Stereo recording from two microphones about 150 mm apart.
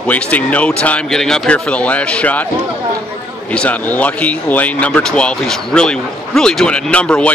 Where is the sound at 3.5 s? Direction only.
10° left (ahead or behind).